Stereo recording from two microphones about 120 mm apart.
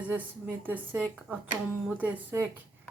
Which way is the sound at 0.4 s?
10° right (ahead or behind).